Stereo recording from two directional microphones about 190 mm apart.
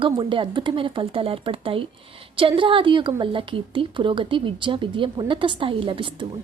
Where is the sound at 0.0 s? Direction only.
25° right (ahead or behind).